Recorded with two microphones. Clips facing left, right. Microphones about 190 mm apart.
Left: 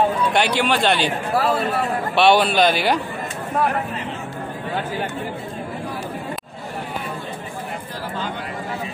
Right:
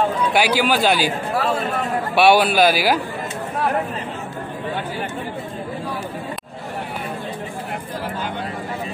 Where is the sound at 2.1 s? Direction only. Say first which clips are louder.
Right 1 dB; 5° right (ahead or behind).